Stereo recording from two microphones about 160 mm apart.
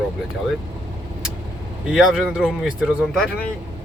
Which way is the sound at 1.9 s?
5° right (ahead or behind).